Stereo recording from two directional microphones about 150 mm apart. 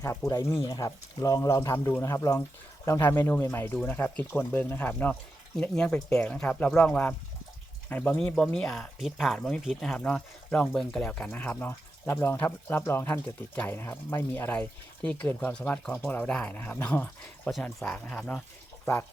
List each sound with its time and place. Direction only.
0.3 s speech: 20° left (ahead or behind)